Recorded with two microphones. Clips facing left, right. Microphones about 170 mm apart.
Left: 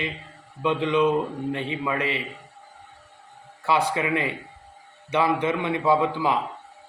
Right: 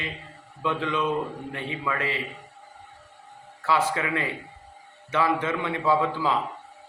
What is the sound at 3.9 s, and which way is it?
A man's voice, 20° left (ahead or behind).